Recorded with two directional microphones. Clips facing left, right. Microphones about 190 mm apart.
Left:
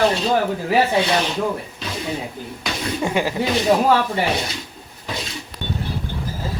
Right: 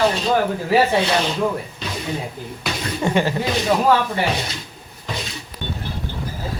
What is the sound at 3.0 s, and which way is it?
Speech, 5° left (ahead or behind).